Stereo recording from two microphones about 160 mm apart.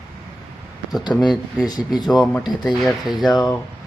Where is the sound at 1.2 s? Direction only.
Centre (ahead or behind).